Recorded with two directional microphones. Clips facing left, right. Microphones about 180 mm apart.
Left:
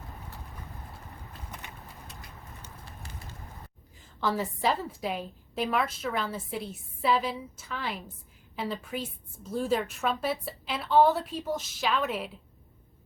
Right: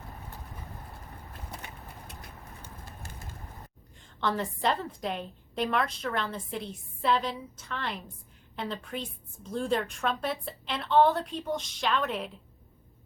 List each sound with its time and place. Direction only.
2.6 s bird: 50° right (ahead or behind)
3.9 s a woman's voice: 5° left (ahead or behind)